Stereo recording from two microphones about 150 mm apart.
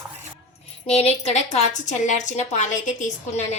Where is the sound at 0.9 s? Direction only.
45° left (ahead or behind).